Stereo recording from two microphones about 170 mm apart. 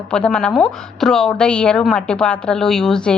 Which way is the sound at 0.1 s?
5° left (ahead or behind).